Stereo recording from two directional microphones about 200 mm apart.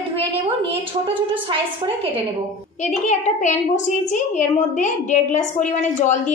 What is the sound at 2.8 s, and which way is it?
A woman's voice, 35° left (ahead or behind).